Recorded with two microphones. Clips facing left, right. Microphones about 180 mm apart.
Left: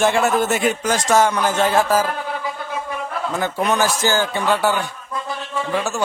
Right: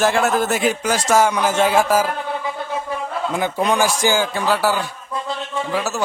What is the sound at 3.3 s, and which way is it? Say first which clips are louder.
A man's voice: right 1 dB; 10° right (ahead or behind).